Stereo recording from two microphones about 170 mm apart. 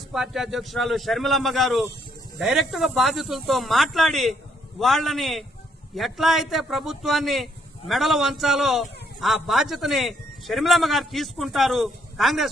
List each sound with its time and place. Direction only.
0.1 s a man's voice: centre (ahead or behind)